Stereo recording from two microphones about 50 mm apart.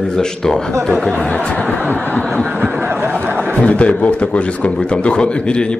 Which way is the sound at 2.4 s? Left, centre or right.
Right.